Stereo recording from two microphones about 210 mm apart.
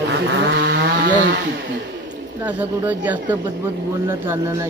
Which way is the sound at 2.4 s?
5° right (ahead or behind).